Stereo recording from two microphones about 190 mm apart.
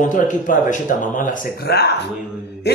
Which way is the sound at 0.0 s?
40° left (ahead or behind).